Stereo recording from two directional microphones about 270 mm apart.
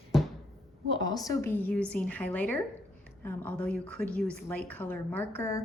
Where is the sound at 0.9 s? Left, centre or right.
Centre.